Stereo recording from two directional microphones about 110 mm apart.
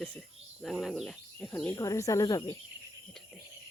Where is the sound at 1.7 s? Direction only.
30° left (ahead or behind).